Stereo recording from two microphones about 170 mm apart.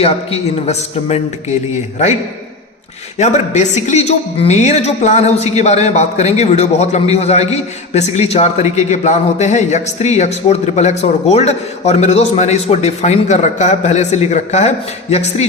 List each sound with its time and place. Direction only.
0.0 s speech: 35° left (ahead or behind)
3.2 s speech: 45° left (ahead or behind)